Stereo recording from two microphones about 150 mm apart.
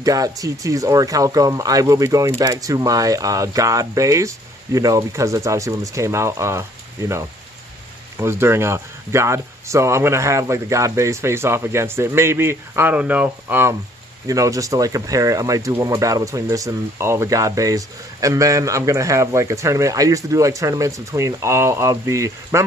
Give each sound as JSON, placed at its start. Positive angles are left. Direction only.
{"t": 0.0, "sound": "speech", "side_deg": -25}